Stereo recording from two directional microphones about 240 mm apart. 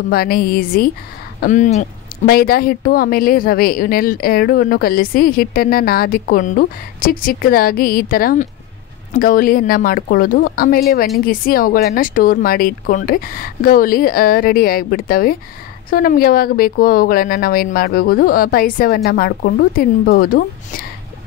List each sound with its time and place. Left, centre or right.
0.1 s a woman's voice: left